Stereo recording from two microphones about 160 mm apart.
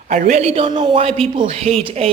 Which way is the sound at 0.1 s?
50° right (ahead or behind).